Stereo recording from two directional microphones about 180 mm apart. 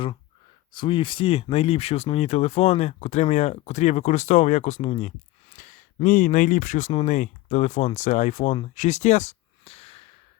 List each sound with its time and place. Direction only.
0.7 s speech: 25° left (ahead or behind)